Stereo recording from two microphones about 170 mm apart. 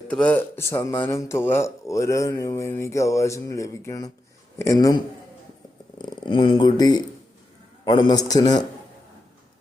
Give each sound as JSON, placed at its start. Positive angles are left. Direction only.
{"t": 0.1, "sound": "speech", "side_deg": 5}